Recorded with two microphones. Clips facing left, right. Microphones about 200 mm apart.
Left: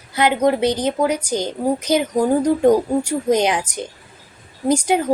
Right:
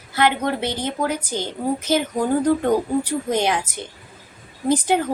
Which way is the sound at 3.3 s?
15° left (ahead or behind).